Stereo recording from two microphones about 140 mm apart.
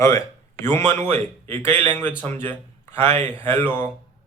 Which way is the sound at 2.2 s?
15° left (ahead or behind).